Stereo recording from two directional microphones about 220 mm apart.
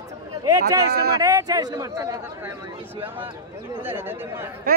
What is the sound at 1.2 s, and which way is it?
Speech, 15° right (ahead or behind).